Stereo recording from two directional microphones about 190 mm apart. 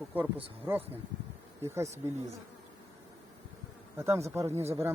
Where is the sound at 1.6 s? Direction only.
15° right (ahead or behind).